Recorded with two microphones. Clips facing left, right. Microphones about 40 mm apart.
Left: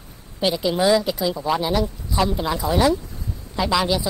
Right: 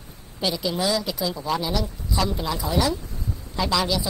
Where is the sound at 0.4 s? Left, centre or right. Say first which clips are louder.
Left 5 dB; left.